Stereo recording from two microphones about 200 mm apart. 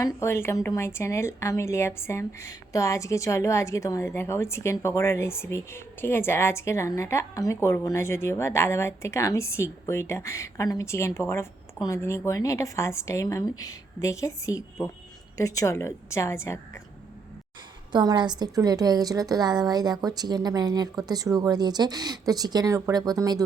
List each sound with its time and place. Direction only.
0.0 s a woman's voice: 15° left (ahead or behind)
17.9 s a woman's voice: 20° right (ahead or behind)